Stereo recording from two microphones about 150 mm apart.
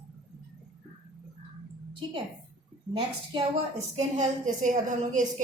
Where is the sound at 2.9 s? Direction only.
45° right (ahead or behind).